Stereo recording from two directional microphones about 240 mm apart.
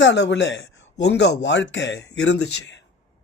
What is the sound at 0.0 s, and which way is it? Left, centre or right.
Speech, left.